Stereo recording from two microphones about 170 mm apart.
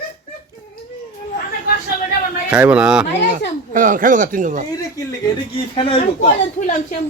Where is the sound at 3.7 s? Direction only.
50° right (ahead or behind).